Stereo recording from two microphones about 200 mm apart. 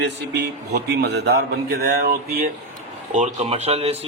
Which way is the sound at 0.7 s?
55° right (ahead or behind).